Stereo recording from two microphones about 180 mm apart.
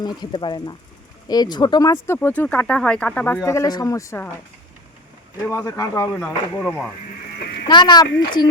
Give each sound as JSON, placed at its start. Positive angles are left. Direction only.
{"t": 0.0, "sound": "speech", "side_deg": 25}
{"t": 5.5, "sound": "speech", "side_deg": 20}
{"t": 7.7, "sound": "speech", "side_deg": 25}